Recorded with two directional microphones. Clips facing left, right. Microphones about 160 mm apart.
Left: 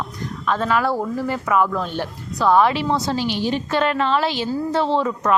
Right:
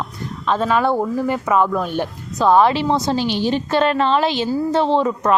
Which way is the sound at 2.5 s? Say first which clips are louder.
Right 2 dB; 30° right (ahead or behind).